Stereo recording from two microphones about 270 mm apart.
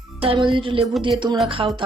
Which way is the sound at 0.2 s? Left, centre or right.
Centre.